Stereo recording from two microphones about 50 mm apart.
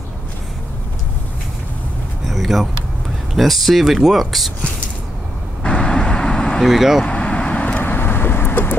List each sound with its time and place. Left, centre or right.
2.2 s a sound: centre
3.3 s speech: centre
5.6 s vehicle: centre
6.6 s speech: centre
7.1 s vehicle: left
7.8 s vehicle: left